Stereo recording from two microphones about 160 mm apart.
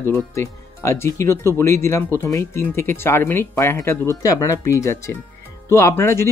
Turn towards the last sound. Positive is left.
turn(degrees=15)  # may be behind; listen again after turning